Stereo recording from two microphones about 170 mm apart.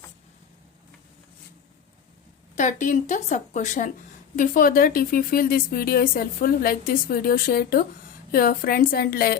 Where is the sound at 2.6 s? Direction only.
45° left (ahead or behind); by 9.3 s 60° left (ahead or behind).